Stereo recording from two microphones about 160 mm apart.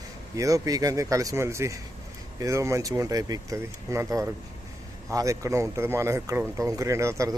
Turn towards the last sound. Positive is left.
turn(degrees=-20)  # may be behind; listen again after turning